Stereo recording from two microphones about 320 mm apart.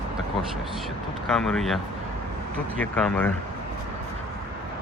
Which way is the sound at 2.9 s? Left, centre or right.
Centre.